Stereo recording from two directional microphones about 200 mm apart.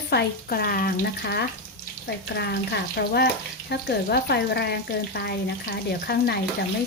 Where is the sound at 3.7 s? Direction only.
55° left (ahead or behind).